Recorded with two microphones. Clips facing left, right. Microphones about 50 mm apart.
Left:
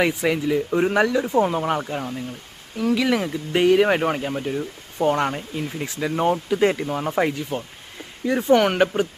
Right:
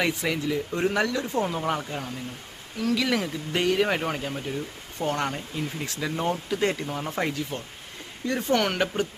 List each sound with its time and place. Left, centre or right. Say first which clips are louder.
0.0 s speech: left 5 dB; centre